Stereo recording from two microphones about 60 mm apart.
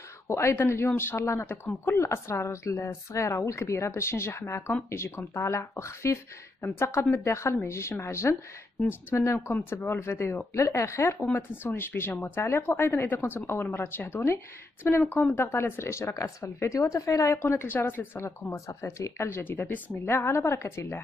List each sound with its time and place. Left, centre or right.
0.3 s speech: left
11.3 s speech: left
17.5 s speech: left
18.1 s speech: left
18.5 s speech: left
19.2 s speech: left
20.1 s speech: left